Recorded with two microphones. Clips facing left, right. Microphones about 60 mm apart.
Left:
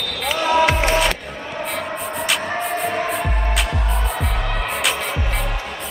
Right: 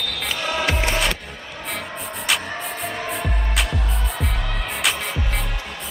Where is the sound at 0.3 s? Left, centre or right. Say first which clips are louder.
Left 8 dB; centre.